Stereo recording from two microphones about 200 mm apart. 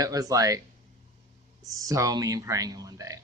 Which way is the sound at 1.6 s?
15° right (ahead or behind).